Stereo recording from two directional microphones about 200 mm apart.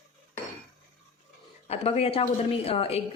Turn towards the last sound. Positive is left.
turn(degrees=30)  # may be behind; listen again after turning